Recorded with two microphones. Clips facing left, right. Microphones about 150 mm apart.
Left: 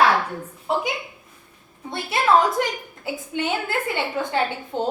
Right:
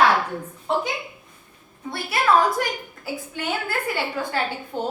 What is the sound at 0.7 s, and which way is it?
Speech, 5° left (ahead or behind).